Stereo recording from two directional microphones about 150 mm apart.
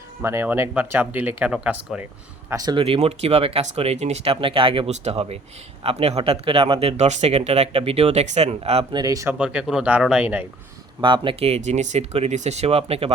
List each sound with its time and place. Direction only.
0.2 s speech: 15° right (ahead or behind)
2.5 s speech: 25° right (ahead or behind)
2.8 s speech: 40° right (ahead or behind); by 9.3 s 20° right (ahead or behind)
9.4 s speech: 5° right (ahead or behind)
11.0 s speech: 35° right (ahead or behind)